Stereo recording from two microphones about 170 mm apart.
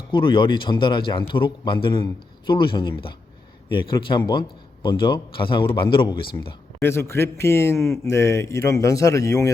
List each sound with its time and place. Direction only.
0.1 s a man's voice: 30° left (ahead or behind)
6.8 s a man's voice: 15° left (ahead or behind)